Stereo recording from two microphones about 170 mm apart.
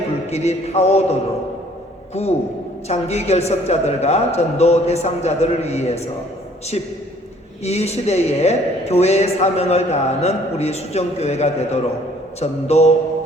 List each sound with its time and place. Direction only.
0.3 s a man's voice: 40° left (ahead or behind)
7.6 s a man's voice: 40° left (ahead or behind)